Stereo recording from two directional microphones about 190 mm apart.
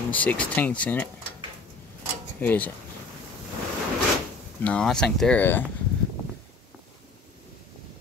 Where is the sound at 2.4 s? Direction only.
10° left (ahead or behind).